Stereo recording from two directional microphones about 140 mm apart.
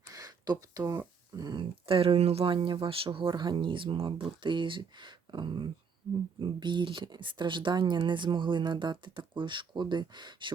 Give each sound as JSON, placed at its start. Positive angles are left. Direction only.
{"t": 0.1, "sound": "speech", "side_deg": -25}